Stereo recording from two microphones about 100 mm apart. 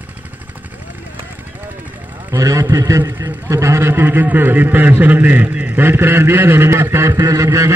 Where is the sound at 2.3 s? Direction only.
35° right (ahead or behind).